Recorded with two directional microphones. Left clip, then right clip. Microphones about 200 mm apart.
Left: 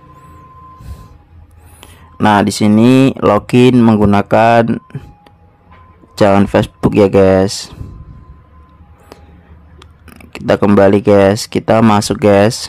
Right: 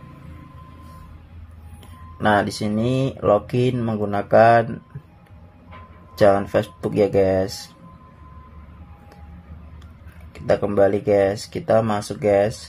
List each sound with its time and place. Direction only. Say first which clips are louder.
1.8 s speech: left 11 dB; 35° left (ahead or behind)
6.1 s speech: left 6 dB; 35° left (ahead or behind)
10.3 s speech: left 9 dB; 40° left (ahead or behind)